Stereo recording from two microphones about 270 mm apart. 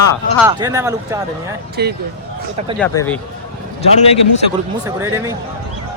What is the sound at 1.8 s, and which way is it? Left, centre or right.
Speech, right.